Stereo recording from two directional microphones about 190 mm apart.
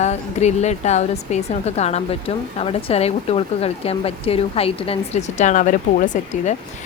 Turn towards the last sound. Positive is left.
turn(degrees=40)  # may be behind; listen again after turning